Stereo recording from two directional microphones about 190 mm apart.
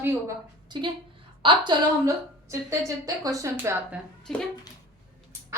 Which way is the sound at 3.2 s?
15° right (ahead or behind).